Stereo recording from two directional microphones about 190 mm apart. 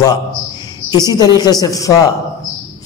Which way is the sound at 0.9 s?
20° left (ahead or behind).